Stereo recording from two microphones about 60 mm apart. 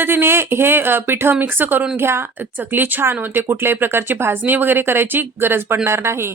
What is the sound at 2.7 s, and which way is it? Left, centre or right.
Speech, right.